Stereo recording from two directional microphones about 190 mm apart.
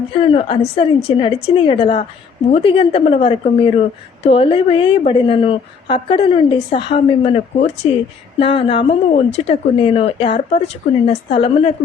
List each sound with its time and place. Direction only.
0.1 s a woman's voice: 30° left (ahead or behind)